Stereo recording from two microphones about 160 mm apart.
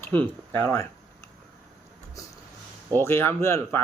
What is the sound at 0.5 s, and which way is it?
Speech, 15° left (ahead or behind).